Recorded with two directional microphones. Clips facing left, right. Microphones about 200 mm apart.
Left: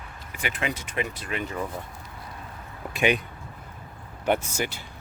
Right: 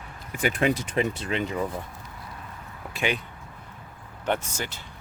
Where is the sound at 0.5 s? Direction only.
35° right (ahead or behind); by 1.6 s 20° right (ahead or behind).